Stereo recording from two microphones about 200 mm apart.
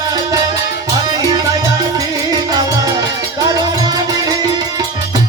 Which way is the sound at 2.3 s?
20° right (ahead or behind).